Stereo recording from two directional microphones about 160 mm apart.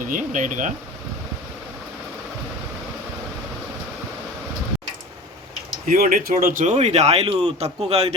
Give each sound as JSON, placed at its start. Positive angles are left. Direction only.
{"t": 0.0, "sound": "speech", "side_deg": -55}
{"t": 5.8, "sound": "speech", "side_deg": -60}